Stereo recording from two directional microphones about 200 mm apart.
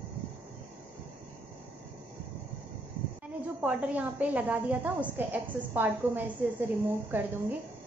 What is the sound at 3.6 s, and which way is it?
A woman's voice, 5° right (ahead or behind).